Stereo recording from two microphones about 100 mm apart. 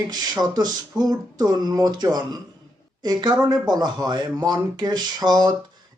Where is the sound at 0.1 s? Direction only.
40° right (ahead or behind).